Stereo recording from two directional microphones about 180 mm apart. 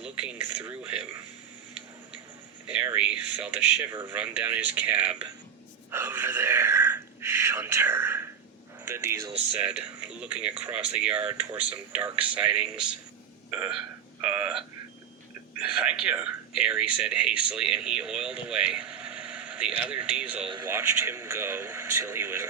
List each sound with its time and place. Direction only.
2.6 s a man's voice: 5° right (ahead or behind)
15.7 s a man's voice: 5° right (ahead or behind)